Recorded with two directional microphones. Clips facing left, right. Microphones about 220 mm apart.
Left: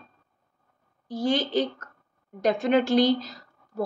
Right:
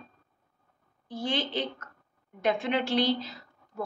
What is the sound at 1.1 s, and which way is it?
A woman's voice, 40° left (ahead or behind).